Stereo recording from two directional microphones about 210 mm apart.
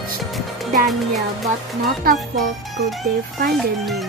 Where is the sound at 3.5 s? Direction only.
Centre (ahead or behind).